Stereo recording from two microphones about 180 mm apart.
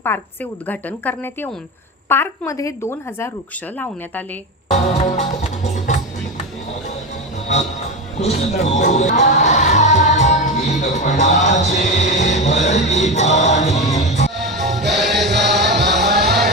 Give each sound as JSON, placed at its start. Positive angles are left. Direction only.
{"t": 0.1, "sound": "a woman's voice", "side_deg": 10}
{"t": 4.7, "sound": "music", "side_deg": 40}
{"t": 8.2, "sound": "music", "side_deg": 40}
{"t": 14.3, "sound": "music", "side_deg": 0}
{"t": 16.0, "sound": "music", "side_deg": -65}